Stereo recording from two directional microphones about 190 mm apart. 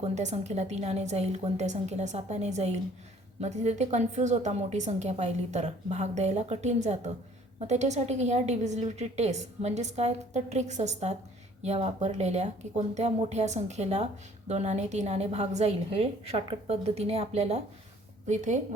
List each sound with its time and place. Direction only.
0.0 s speech: 35° right (ahead or behind)